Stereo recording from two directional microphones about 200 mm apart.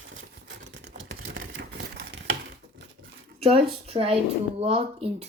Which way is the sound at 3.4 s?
30° right (ahead or behind).